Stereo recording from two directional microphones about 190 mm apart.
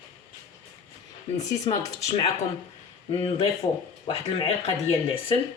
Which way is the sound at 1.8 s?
15° left (ahead or behind).